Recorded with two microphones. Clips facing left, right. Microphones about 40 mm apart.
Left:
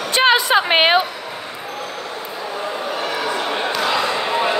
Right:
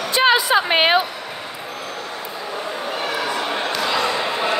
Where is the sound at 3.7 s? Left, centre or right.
Centre.